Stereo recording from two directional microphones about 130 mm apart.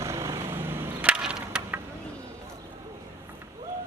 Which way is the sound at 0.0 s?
25° right (ahead or behind).